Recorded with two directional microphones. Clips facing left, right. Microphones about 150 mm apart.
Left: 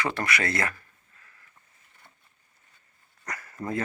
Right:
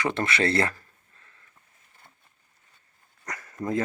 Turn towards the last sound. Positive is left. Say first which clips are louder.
# right 3 dB
turn(degrees=-15)  # may be behind; listen again after turning